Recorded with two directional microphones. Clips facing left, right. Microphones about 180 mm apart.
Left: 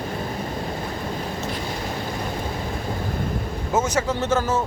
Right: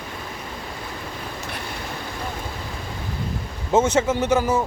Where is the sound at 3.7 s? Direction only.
25° right (ahead or behind).